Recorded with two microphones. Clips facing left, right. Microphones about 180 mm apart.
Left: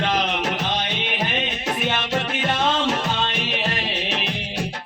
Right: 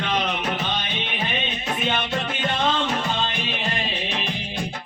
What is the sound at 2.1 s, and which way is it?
Music, 75° left (ahead or behind).